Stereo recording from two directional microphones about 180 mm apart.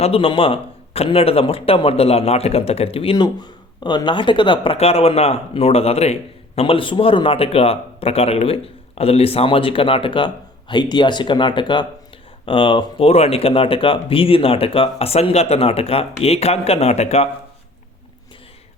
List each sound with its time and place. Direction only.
0.0 s a man's voice: 30° left (ahead or behind)